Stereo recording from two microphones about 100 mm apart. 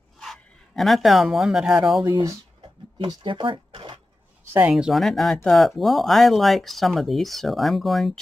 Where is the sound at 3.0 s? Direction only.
50° right (ahead or behind).